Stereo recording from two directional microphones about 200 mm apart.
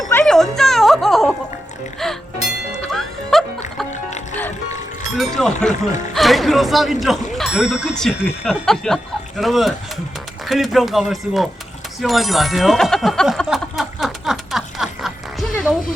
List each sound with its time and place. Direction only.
0.1 s music: 5° left (ahead or behind)
2.7 s music: centre (ahead or behind)
3.9 s music: 35° left (ahead or behind)
5.1 s speech: centre (ahead or behind)
11.9 s bicycle bell: centre (ahead or behind)